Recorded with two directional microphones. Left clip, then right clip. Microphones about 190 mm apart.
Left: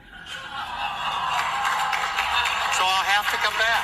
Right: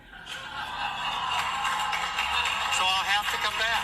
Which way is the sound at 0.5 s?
15° left (ahead or behind).